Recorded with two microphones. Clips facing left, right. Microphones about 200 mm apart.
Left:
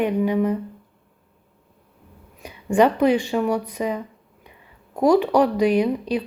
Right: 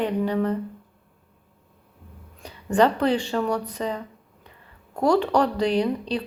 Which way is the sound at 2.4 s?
10° left (ahead or behind).